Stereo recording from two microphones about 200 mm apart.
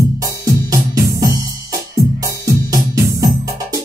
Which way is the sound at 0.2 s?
15° right (ahead or behind).